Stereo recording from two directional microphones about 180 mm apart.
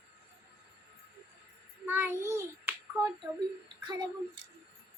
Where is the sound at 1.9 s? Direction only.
15° right (ahead or behind).